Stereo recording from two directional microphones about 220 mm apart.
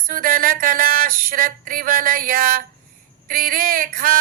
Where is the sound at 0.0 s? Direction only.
40° right (ahead or behind).